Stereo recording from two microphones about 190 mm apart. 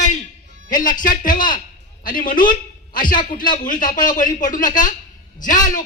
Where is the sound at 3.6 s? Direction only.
45° left (ahead or behind).